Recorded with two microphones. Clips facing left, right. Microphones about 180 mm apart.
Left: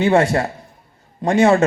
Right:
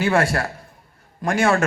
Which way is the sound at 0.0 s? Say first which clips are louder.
Left 5 dB; 20° left (ahead or behind).